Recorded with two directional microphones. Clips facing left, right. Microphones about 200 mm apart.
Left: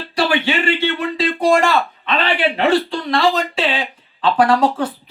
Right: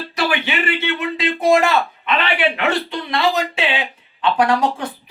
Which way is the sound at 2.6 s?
30° left (ahead or behind).